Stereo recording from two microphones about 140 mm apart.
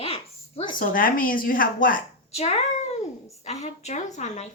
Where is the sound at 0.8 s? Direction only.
85° left.